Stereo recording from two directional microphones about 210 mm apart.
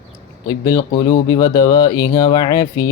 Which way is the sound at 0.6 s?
15° left (ahead or behind).